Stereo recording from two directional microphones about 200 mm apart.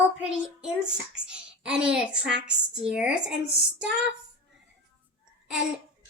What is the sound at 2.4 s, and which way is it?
Speech, 5° right (ahead or behind).